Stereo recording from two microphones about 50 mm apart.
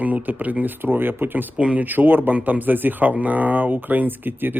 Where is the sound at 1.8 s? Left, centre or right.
Right.